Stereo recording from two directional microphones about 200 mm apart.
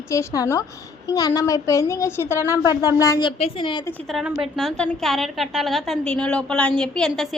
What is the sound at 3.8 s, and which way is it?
A woman's voice, centre (ahead or behind).